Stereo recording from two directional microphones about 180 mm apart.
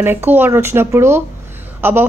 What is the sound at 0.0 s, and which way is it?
A woman's voice, 10° right (ahead or behind).